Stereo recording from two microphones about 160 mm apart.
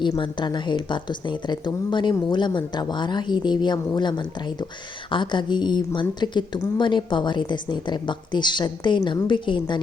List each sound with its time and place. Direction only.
0.0 s a woman's voice: 30° left (ahead or behind)